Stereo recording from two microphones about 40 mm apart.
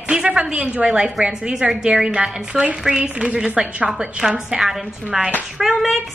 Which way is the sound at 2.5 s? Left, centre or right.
Right.